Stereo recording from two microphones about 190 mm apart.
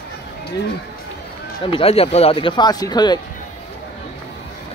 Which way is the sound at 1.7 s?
30° left (ahead or behind).